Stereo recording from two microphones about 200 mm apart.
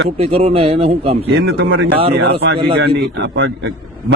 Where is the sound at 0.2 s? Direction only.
30° right (ahead or behind).